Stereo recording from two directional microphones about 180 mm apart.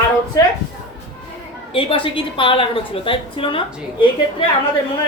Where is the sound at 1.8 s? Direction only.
30° left (ahead or behind).